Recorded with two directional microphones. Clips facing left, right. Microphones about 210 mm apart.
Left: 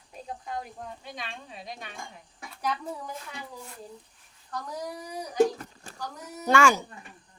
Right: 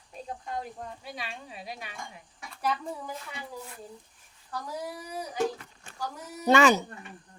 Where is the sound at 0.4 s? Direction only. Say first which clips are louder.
Even; centre (ahead or behind).